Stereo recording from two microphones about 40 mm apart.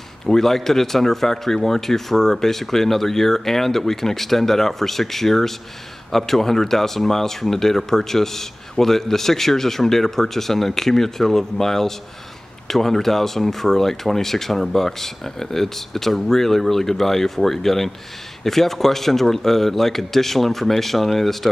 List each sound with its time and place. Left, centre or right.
0.3 s speech: centre